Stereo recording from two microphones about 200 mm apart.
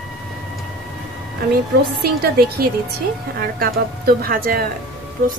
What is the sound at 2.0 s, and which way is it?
Speech, 50° right (ahead or behind).